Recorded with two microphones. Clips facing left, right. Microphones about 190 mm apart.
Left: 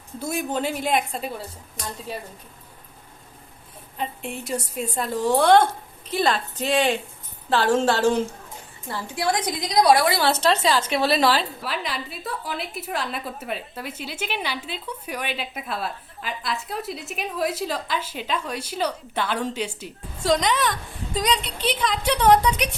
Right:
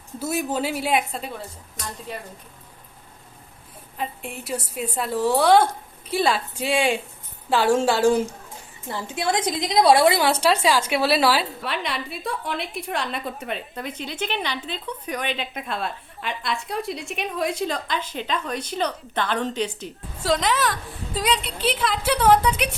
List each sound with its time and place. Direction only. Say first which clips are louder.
0.2 s a woman's voice: right 1 dB; 5° right (ahead or behind)
3.9 s a woman's voice: left 1 dB; centre (ahead or behind)
8.9 s a woman's voice: even; 20° right (ahead or behind)
10.2 s a woman's voice: right 1 dB; 10° right (ahead or behind); by 19.9 s 10° left (ahead or behind)
20.2 s a woman's voice: left 1 dB; 5° right (ahead or behind)